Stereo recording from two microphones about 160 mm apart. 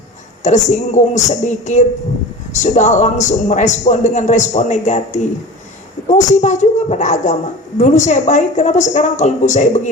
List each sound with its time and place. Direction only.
0.4 s a man's voice: 50° left (ahead or behind)